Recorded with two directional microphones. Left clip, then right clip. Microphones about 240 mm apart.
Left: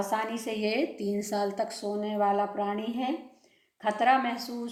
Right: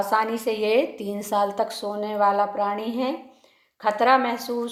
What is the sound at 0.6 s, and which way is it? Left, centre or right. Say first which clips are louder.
Speech: right 7 dB; centre.